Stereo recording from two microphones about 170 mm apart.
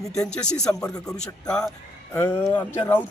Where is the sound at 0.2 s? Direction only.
5° left (ahead or behind).